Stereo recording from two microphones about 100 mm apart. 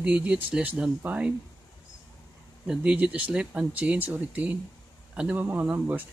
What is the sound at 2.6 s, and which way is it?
Speech, 10° right (ahead or behind).